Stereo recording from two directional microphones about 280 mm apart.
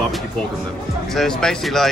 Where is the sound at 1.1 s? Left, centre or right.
Centre.